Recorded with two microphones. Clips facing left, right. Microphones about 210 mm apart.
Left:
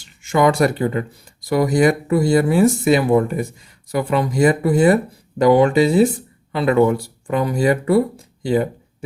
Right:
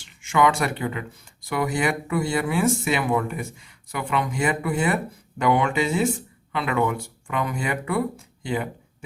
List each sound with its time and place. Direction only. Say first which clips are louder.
0.0 s speech: left 5 dB; 40° left (ahead or behind)